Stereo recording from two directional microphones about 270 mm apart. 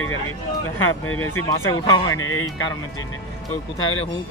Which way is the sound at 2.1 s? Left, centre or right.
Left.